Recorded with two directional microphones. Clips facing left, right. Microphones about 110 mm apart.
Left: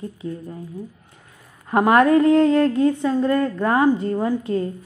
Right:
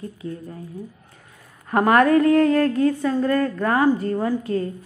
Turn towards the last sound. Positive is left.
turn(degrees=25)  # may be behind; listen again after turning